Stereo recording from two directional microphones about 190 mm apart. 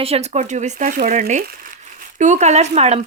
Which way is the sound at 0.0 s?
35° right (ahead or behind).